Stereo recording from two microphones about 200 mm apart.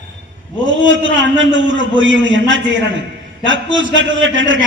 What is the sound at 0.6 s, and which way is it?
A man's voice, 70° right (ahead or behind).